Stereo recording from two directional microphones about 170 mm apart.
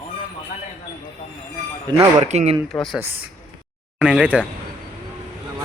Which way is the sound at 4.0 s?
5° right (ahead or behind).